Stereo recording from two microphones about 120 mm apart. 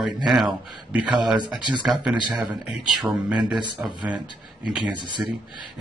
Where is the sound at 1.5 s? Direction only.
5° right (ahead or behind).